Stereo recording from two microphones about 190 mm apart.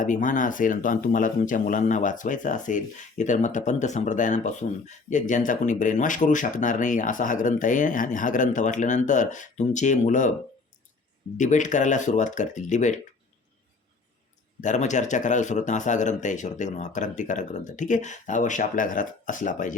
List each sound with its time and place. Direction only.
0.0 s speech: 45° left (ahead or behind)
11.3 s speech: 40° left (ahead or behind)
14.6 s speech: 40° left (ahead or behind)